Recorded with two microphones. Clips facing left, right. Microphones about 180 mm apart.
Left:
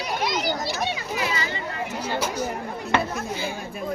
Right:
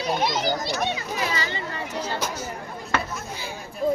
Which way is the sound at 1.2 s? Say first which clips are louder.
Even; 30° right (ahead or behind).